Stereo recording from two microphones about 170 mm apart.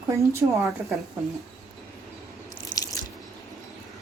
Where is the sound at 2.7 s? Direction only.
20° left (ahead or behind).